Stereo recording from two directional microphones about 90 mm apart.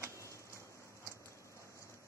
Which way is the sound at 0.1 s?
35° left (ahead or behind).